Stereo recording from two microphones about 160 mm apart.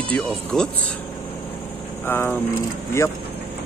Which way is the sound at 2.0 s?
15° left (ahead or behind).